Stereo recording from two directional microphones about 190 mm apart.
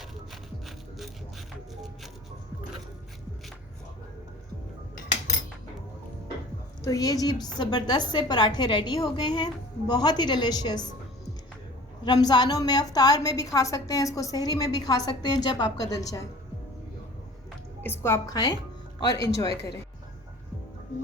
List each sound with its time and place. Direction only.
0.6 s music: centre (ahead or behind)
6.8 s a woman's voice: 20° left (ahead or behind)
12.0 s a woman's voice: 20° left (ahead or behind)
17.8 s a woman's voice: 10° left (ahead or behind)